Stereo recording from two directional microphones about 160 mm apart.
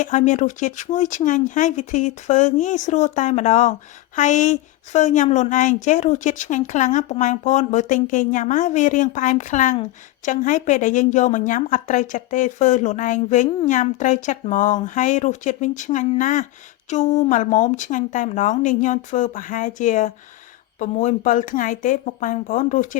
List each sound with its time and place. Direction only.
0.0 s speech: 50° left (ahead or behind)